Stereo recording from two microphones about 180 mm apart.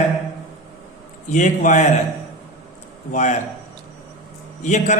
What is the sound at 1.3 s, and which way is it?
Speech, 45° left (ahead or behind).